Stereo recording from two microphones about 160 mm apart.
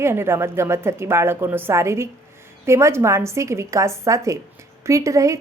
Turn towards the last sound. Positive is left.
turn(degrees=-20)  # may be behind; listen again after turning